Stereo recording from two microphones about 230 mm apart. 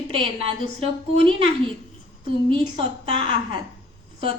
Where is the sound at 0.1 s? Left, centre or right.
Right.